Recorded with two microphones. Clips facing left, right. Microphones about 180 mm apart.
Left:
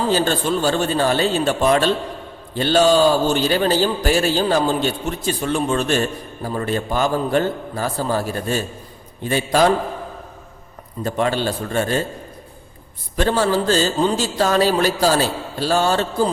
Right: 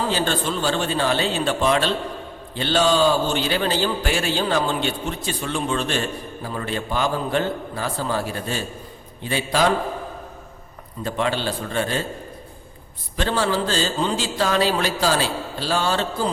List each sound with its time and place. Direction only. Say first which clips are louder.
0.1 s speech: left 4 dB; 45° left (ahead or behind)
11.0 s speech: left 3 dB; 45° left (ahead or behind)
13.1 s speech: left 4 dB; 45° left (ahead or behind)